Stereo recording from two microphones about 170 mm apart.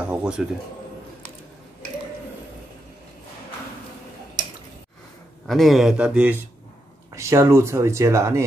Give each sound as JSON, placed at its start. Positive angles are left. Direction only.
{"t": 0.0, "sound": "speech", "side_deg": -5}
{"t": 5.5, "sound": "a man's voice", "side_deg": 0}